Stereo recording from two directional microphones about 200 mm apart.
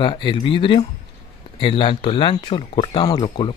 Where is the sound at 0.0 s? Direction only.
25° left (ahead or behind).